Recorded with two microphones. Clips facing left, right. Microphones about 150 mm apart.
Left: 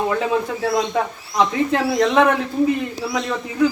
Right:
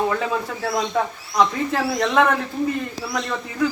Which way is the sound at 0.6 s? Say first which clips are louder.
Left 2 dB; centre (ahead or behind).